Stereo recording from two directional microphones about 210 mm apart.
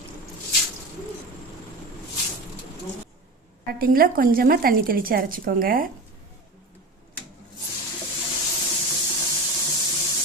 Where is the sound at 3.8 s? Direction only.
45° right (ahead or behind).